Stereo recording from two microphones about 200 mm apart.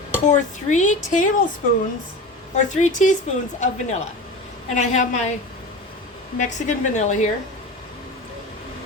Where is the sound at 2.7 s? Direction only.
40° left (ahead or behind).